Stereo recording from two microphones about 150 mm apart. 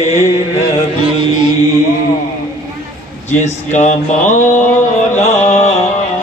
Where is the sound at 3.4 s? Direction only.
50° left (ahead or behind).